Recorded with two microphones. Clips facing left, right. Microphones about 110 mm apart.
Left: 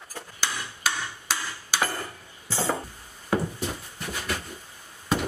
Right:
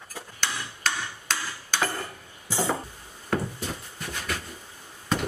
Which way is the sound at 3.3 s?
10° left (ahead or behind).